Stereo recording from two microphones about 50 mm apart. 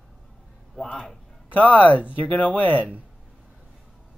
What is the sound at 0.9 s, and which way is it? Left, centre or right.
Speech, centre.